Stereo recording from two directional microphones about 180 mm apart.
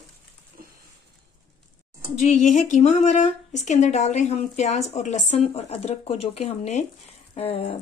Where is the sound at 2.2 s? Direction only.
40° left (ahead or behind).